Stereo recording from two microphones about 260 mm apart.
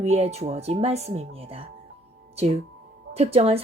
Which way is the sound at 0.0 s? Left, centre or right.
Right.